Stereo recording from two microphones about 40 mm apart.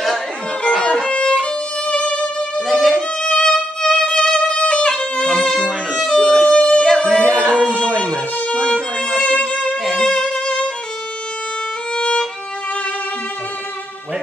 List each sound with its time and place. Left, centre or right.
0.7 s music: left
1.1 s violin: left
2.7 s violin: centre
3.2 s music: left
4.9 s music: centre
6.5 s music: left
7.3 s a sound: left
7.8 s music: left
8.5 s violin: left
9.9 s violin: centre
11.9 s violin: left